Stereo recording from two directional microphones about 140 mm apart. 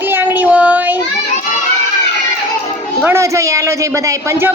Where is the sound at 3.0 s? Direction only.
20° right (ahead or behind).